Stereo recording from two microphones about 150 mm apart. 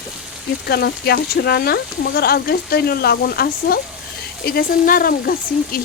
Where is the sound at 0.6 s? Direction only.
90° left.